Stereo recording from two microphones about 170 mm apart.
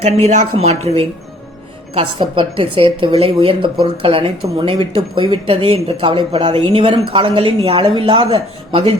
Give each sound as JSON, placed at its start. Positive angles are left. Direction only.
{"t": 0.0, "sound": "speech", "side_deg": -40}